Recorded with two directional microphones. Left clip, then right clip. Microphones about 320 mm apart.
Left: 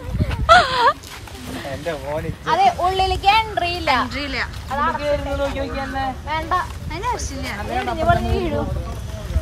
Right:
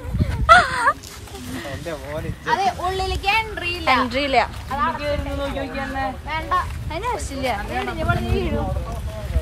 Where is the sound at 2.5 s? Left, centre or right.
Centre.